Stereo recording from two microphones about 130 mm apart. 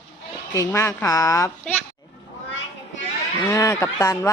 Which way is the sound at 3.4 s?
25° left (ahead or behind).